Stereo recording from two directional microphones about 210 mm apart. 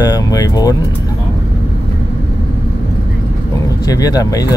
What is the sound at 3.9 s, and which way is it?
Speech, 15° left (ahead or behind).